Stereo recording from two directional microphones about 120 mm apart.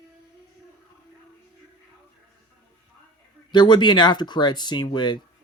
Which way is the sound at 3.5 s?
40° left (ahead or behind).